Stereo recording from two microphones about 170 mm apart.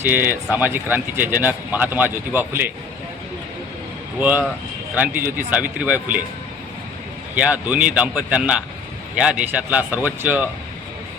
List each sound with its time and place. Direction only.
0.0 s speech: 10° right (ahead or behind)
4.2 s speech: 10° right (ahead or behind)
7.3 s speech: 10° right (ahead or behind)